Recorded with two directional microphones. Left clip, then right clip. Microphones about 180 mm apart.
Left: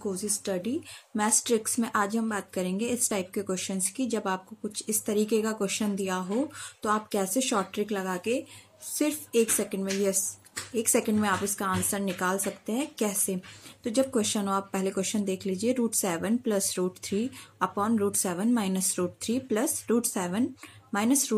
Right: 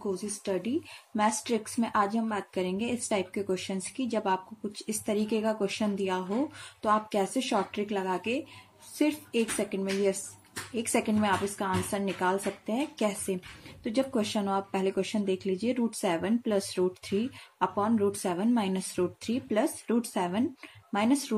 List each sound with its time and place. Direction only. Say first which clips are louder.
0.1 s a woman's voice: right 1 dB; 30° left (ahead or behind)